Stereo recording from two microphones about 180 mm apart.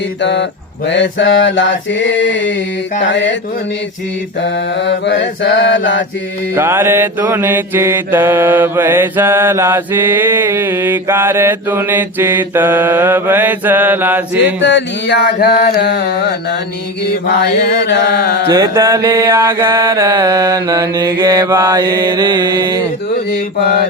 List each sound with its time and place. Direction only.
0.2 s mantra: 75° left (ahead or behind)
0.9 s mantra: 90° left
4.4 s mantra: 90° left
6.5 s mantra: 15° right (ahead or behind)
14.6 s mantra: 90° left; by 16.6 s 60° left (ahead or behind)
17.7 s mantra: 65° left (ahead or behind)
18.4 s mantra: 20° right (ahead or behind)